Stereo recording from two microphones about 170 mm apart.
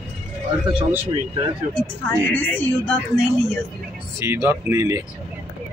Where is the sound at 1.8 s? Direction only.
10° left (ahead or behind).